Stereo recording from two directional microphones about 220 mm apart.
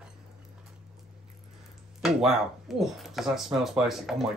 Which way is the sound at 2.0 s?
Centre (ahead or behind).